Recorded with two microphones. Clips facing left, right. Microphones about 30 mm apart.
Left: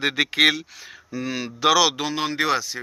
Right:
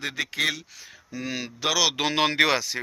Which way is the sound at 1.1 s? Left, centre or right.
Centre.